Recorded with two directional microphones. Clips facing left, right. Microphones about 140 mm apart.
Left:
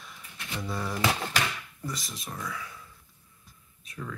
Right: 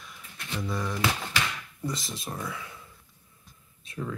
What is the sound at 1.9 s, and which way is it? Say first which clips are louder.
Speech: right 4 dB; 25° right (ahead or behind).